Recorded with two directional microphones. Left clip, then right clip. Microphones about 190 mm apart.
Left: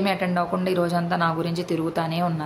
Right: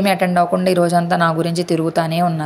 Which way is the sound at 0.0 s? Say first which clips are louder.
Right 8 dB; 30° right (ahead or behind).